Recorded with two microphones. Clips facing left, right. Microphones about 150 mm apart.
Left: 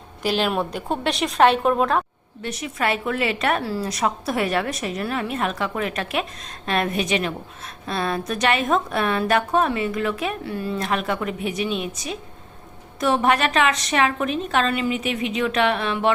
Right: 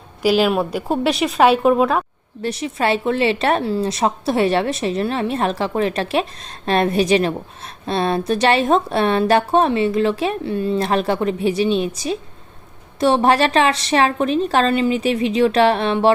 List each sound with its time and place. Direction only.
0.2 s speech: 5° right (ahead or behind)
2.4 s a woman's voice: 30° right (ahead or behind)